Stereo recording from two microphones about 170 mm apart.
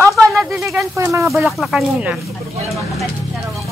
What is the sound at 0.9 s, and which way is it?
Speech, 15° right (ahead or behind).